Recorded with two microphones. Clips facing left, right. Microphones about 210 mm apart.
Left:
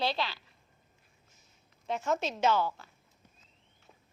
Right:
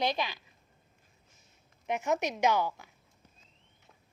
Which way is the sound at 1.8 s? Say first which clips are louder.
Right 1 dB; 15° right (ahead or behind).